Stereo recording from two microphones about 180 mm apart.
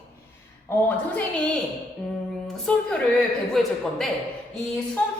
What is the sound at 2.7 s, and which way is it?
A man's voice, 5° left (ahead or behind).